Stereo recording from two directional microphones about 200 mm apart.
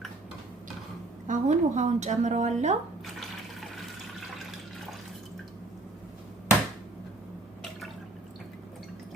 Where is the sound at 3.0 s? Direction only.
Centre (ahead or behind).